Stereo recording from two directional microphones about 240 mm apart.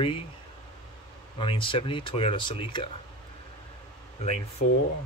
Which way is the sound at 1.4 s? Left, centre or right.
Left.